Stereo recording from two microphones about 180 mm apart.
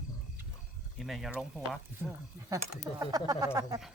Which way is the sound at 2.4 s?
15° right (ahead or behind).